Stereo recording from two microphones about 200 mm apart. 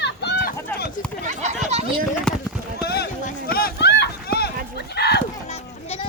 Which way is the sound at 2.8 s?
50° left (ahead or behind).